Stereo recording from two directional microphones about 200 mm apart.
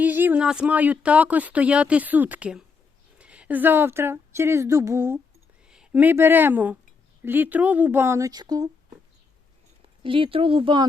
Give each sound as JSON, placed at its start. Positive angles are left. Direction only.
{"t": 0.0, "sound": "speech", "side_deg": -10}
{"t": 10.0, "sound": "speech", "side_deg": -25}